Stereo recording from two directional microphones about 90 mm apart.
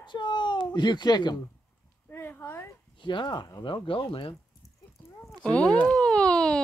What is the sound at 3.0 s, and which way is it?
Speech, 65° left (ahead or behind).